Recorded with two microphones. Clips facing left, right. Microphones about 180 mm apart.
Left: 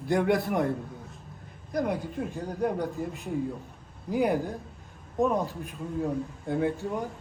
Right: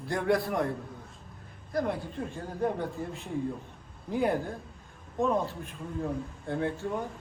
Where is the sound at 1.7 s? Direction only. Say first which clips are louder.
Left 1 dB; 20° left (ahead or behind).